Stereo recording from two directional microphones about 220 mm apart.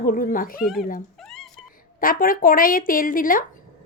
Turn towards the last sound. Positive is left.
turn(degrees=40)  # may be behind; listen again after turning